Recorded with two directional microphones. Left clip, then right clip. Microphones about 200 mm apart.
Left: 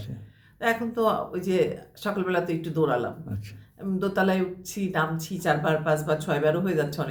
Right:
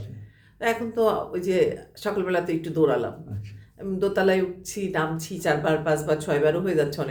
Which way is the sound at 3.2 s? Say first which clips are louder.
Left 3 dB; 45° left (ahead or behind).